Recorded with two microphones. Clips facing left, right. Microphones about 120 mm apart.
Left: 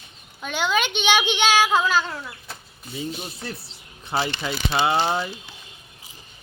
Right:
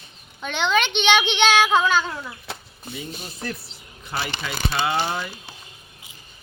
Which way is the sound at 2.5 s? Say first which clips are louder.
Right 4 dB; 75° right (ahead or behind).